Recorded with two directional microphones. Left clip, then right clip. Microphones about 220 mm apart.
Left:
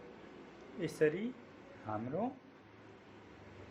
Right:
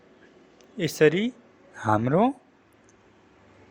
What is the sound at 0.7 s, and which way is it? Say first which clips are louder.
A man's voice: right 13 dB; 40° right (ahead or behind).